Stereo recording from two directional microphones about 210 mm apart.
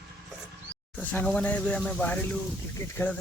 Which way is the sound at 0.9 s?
5° left (ahead or behind).